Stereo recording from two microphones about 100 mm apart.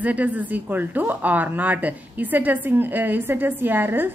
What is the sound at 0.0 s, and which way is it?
Speech, 15° right (ahead or behind).